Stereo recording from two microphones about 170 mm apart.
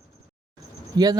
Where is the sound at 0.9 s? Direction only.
25° right (ahead or behind).